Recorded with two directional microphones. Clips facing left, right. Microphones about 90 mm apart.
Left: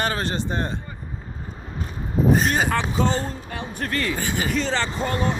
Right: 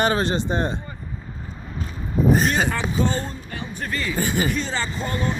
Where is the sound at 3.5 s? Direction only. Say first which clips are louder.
Left 1 dB; 70° left (ahead or behind).